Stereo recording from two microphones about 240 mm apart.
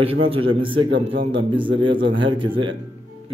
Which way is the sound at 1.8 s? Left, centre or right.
Right.